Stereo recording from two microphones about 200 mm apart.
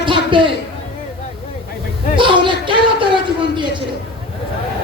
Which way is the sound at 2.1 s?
25° right (ahead or behind).